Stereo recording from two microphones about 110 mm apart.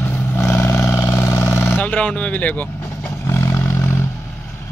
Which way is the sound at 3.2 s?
25° left (ahead or behind).